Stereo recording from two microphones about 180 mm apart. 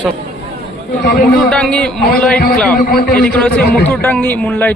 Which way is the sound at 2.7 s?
50° left (ahead or behind).